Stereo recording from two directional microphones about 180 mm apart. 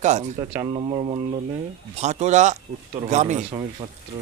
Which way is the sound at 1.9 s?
40° right (ahead or behind).